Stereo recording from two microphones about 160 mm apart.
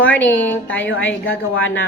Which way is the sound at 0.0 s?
10° left (ahead or behind).